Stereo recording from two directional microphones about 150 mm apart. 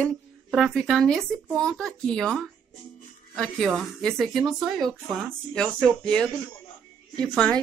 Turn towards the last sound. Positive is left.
turn(degrees=5)  # may be behind; listen again after turning